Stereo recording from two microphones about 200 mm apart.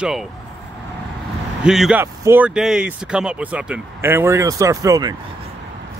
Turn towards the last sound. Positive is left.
turn(degrees=-20)  # may be behind; listen again after turning